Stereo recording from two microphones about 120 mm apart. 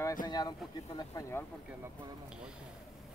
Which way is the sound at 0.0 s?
35° left (ahead or behind).